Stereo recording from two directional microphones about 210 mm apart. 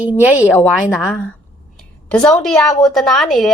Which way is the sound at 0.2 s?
5° right (ahead or behind).